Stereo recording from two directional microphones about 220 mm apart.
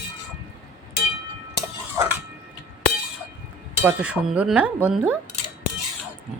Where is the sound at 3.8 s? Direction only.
5° right (ahead or behind).